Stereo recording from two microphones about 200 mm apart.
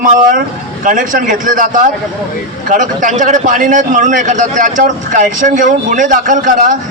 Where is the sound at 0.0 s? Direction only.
40° right (ahead or behind).